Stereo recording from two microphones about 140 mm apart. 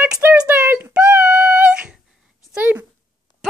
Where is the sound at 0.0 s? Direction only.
10° right (ahead or behind).